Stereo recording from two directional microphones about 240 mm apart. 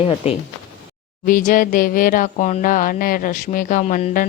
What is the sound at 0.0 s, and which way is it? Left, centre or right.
Speech, left.